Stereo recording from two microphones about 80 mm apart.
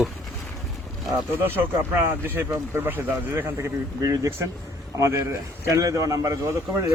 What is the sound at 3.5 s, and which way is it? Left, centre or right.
Speech, right.